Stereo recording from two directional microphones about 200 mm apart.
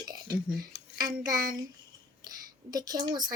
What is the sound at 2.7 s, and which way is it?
Speech, 20° right (ahead or behind).